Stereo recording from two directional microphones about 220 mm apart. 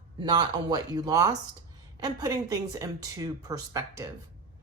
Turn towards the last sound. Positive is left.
turn(degrees=-15)  # may be behind; listen again after turning